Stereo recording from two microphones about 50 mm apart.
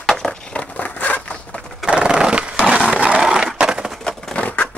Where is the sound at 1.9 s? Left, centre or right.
Centre.